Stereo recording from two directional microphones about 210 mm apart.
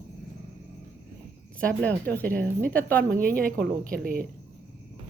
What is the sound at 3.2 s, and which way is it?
A woman's voice, 45° right (ahead or behind).